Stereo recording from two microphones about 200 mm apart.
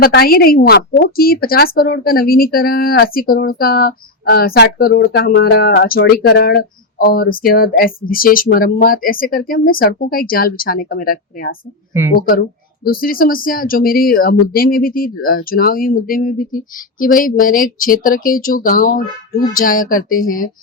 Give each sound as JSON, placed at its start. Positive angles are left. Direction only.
{"t": 0.0, "sound": "a woman's voice", "side_deg": 50}